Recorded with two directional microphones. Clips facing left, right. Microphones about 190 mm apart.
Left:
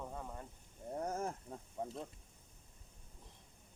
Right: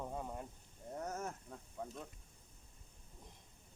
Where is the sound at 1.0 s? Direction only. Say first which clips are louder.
Left 3 dB; 30° left (ahead or behind).